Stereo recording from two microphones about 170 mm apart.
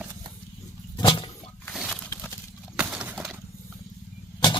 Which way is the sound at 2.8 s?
5° right (ahead or behind).